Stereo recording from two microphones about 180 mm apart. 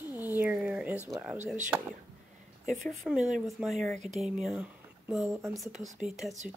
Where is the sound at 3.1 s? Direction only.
5° right (ahead or behind).